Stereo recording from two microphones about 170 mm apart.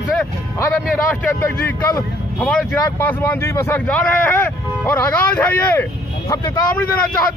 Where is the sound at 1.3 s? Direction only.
15° left (ahead or behind).